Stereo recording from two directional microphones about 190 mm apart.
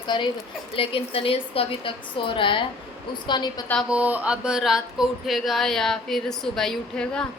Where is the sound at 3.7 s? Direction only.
Centre (ahead or behind).